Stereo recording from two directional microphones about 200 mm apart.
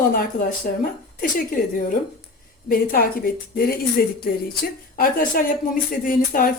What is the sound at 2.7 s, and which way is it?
Speech, 45° left (ahead or behind).